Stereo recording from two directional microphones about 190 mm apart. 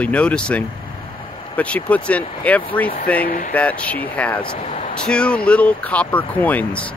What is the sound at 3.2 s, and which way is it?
Speech, 45° left (ahead or behind).